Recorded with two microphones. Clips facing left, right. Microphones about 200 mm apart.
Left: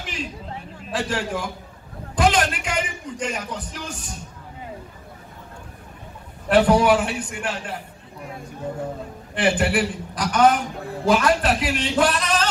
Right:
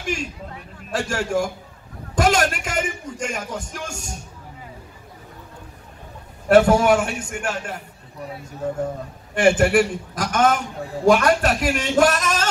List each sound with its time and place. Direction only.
0.0 s chatter: 45° right (ahead or behind)
0.9 s a man's voice: 45° right (ahead or behind)
6.5 s a man's voice: 45° right (ahead or behind)
9.3 s a man's voice: 45° right (ahead or behind)